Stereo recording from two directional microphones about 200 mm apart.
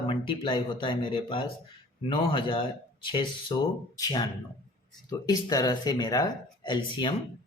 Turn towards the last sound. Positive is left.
turn(degrees=25)  # may be behind; listen again after turning